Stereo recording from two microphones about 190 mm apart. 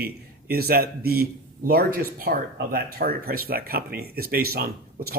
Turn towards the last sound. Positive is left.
turn(degrees=-50)  # may be behind; listen again after turning